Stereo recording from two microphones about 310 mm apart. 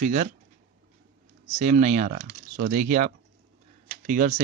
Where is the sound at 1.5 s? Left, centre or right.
Right.